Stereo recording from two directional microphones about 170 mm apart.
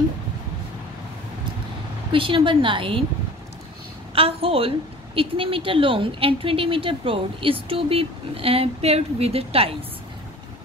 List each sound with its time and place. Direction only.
2.1 s a woman's voice: 30° right (ahead or behind)
4.1 s a woman's voice: 35° right (ahead or behind)